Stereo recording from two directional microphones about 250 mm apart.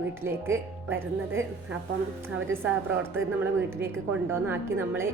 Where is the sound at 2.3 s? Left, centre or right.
Right.